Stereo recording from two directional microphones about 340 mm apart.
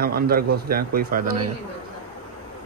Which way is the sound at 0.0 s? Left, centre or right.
Right.